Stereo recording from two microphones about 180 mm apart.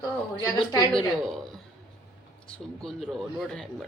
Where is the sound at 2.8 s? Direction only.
5° left (ahead or behind).